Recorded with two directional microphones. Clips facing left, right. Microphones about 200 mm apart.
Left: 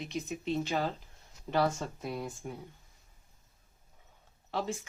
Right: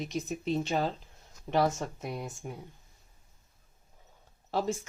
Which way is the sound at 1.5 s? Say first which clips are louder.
Right 2 dB; 20° right (ahead or behind).